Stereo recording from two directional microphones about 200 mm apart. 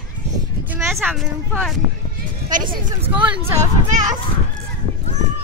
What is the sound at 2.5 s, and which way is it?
Speech, 45° right (ahead or behind).